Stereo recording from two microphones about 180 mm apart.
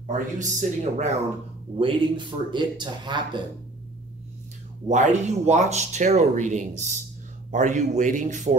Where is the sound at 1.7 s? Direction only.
25° right (ahead or behind).